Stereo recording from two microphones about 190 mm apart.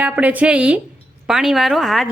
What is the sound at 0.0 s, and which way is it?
A woman's voice, 10° right (ahead or behind).